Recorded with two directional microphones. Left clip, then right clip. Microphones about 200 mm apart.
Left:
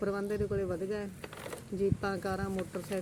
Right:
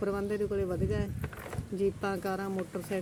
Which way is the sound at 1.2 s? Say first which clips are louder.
Right 1 dB; 60° left (ahead or behind).